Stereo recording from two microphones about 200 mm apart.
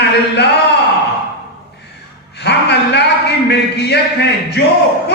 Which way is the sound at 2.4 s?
55° left (ahead or behind).